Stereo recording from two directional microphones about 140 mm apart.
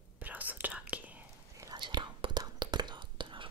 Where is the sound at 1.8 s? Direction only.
35° right (ahead or behind).